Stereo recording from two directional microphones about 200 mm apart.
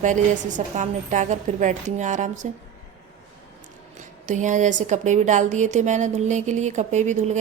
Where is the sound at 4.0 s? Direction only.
40° right (ahead or behind).